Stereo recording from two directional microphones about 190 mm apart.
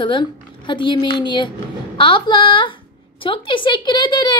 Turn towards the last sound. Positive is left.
turn(degrees=25)  # may be behind; listen again after turning